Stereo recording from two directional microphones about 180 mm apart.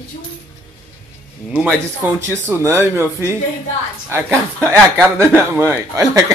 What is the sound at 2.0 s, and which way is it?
Speech, 10° right (ahead or behind).